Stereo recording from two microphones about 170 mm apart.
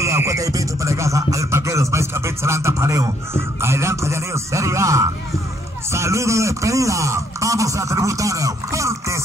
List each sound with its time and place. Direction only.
0.0 s music: 15° right (ahead or behind)
5.9 s speech: 15° right (ahead or behind)